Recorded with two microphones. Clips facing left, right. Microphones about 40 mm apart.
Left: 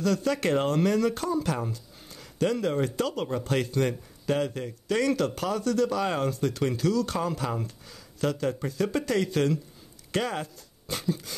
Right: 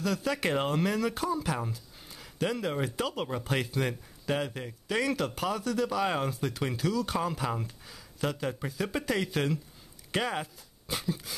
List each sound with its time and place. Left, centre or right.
0.0 s speech: centre